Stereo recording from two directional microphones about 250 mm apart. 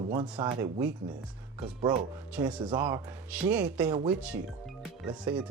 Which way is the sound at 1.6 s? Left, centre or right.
Right.